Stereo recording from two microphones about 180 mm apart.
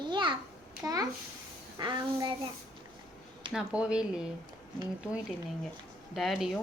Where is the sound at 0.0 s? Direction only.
25° right (ahead or behind).